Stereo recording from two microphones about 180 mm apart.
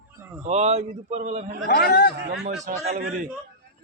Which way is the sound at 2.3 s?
65° right (ahead or behind).